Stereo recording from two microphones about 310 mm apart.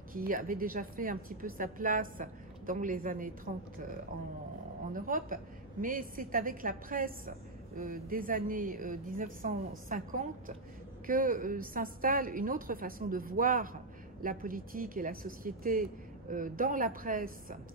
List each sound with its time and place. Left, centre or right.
0.1 s a woman's voice: right
4.9 s a woman's voice: right